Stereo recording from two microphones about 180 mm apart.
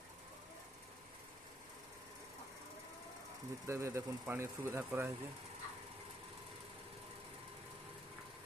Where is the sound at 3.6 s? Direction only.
15° right (ahead or behind).